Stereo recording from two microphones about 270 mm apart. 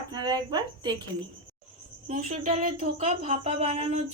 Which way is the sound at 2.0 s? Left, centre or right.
Right.